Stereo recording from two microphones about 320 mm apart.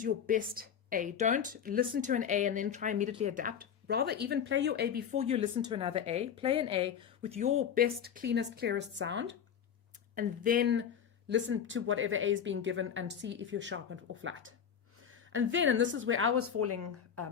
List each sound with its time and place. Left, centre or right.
0.0 s a woman's voice: right